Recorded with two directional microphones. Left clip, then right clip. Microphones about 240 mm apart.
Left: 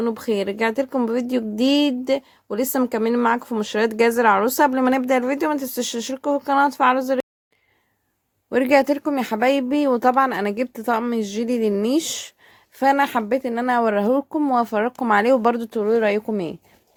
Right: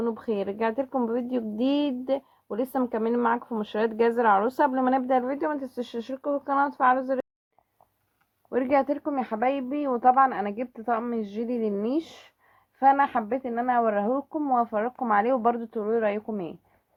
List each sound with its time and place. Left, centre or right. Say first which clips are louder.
0.0 s a woman's voice: left 6 dB; left
8.4 s speech: left 7 dB; left